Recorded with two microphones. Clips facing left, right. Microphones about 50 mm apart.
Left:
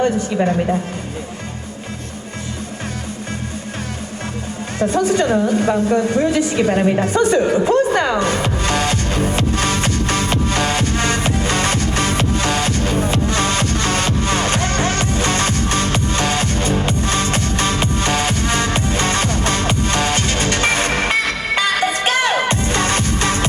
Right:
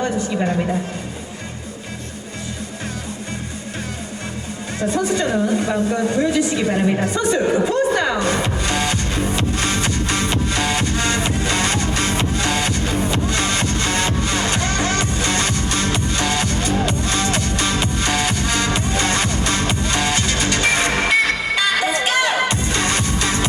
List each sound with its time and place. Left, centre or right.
4.8 s a woman's voice: left
8.6 s music: left